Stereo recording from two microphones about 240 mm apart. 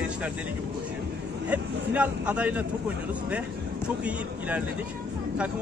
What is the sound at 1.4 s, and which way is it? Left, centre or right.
Speech, centre.